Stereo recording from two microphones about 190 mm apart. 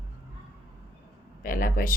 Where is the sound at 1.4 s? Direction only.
45° left (ahead or behind).